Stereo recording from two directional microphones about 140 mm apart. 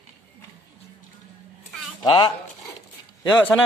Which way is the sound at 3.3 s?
15° left (ahead or behind).